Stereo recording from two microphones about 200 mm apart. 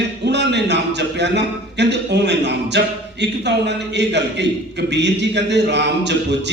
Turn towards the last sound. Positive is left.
turn(degrees=-60)  # may be behind; listen again after turning